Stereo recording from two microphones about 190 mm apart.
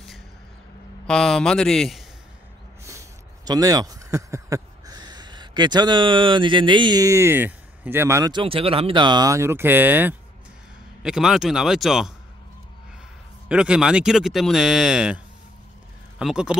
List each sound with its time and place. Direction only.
1.0 s speech: 5° left (ahead or behind)
2.9 s speech: 15° right (ahead or behind); by 12.1 s centre (ahead or behind)
13.5 s speech: 5° right (ahead or behind)
16.2 s speech: 5° right (ahead or behind)